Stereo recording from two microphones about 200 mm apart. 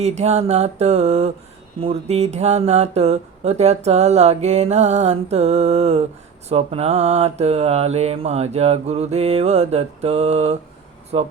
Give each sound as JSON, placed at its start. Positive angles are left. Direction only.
{"t": 0.0, "sound": "speech", "side_deg": -35}